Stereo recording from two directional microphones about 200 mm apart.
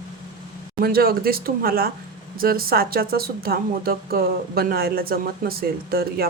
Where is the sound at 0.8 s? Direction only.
50° right (ahead or behind).